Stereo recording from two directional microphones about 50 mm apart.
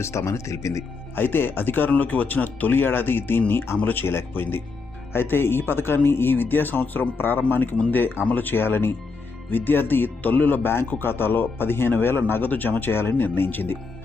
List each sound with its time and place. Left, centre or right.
0.0 s speech: left
1.1 s speech: left